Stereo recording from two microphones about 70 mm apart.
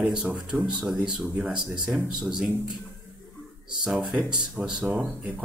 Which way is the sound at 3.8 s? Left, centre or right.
Centre.